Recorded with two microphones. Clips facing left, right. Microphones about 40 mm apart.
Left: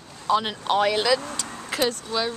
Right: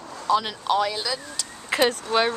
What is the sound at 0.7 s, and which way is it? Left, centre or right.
Speech, left.